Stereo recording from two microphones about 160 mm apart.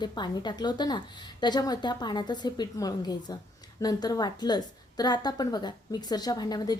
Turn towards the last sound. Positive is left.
turn(degrees=25)  # may be behind; listen again after turning